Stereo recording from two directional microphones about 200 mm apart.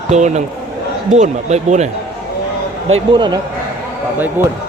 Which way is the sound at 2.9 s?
25° right (ahead or behind).